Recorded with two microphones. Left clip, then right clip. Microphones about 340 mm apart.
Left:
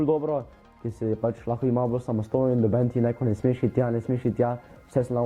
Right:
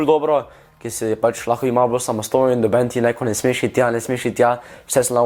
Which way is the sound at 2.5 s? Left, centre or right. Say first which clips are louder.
Right 8 dB; centre.